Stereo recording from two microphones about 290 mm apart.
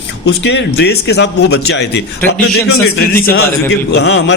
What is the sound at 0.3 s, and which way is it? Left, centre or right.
A man's voice, left.